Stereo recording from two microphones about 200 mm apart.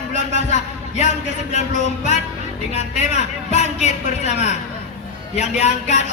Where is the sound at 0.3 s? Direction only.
35° left (ahead or behind).